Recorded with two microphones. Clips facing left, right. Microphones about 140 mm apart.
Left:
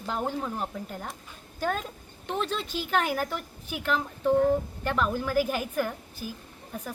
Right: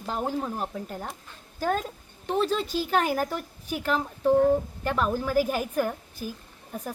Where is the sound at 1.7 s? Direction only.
40° right (ahead or behind).